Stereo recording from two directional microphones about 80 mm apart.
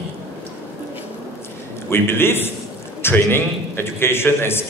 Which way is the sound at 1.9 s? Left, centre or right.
Left.